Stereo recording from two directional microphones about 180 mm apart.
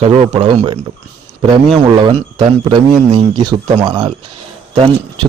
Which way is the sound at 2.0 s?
25° right (ahead or behind).